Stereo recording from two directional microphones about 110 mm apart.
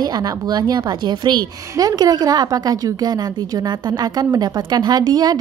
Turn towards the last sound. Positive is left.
turn(degrees=-40)  # may be behind; listen again after turning